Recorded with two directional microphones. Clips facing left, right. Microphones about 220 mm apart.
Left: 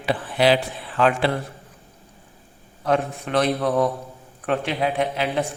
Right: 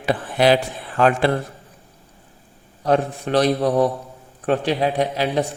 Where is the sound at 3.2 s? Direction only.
35° right (ahead or behind).